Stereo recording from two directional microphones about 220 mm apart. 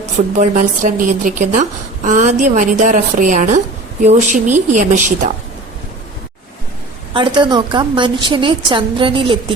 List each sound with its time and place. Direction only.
0.0 s a woman's voice: 35° right (ahead or behind)
7.1 s a woman's voice: 20° right (ahead or behind)